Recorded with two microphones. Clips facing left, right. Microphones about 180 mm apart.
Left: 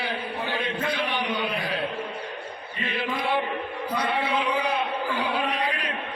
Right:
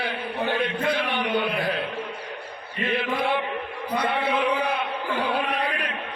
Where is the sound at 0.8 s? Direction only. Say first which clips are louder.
Right 2 dB; 55° right (ahead or behind).